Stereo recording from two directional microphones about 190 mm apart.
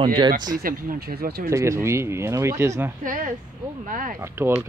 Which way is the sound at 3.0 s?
45° right (ahead or behind).